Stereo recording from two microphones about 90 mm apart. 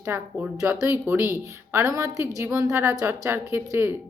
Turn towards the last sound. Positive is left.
turn(degrees=-30)  # may be behind; listen again after turning